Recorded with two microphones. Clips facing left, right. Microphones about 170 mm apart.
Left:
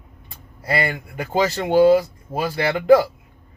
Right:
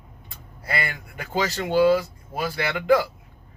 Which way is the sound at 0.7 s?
35° left (ahead or behind).